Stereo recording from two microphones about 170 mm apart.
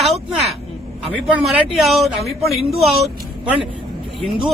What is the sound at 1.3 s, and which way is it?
A man's voice, 5° right (ahead or behind).